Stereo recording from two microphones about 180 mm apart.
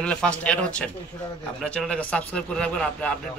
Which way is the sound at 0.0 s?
5° left (ahead or behind).